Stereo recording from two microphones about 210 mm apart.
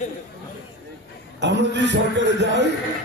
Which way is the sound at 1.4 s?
55° right (ahead or behind).